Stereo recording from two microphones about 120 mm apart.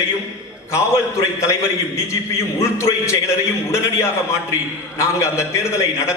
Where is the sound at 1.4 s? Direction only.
25° left (ahead or behind).